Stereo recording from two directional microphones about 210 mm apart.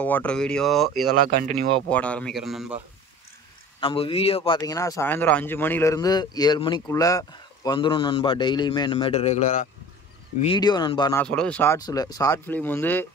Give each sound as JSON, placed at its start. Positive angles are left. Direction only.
{"t": 0.0, "sound": "speech", "side_deg": 5}
{"t": 1.4, "sound": "speech", "side_deg": -30}
{"t": 1.9, "sound": "speech", "side_deg": 5}
{"t": 3.8, "sound": "speech", "side_deg": 25}
{"t": 10.4, "sound": "speech", "side_deg": 20}
{"t": 11.1, "sound": "speech", "side_deg": 5}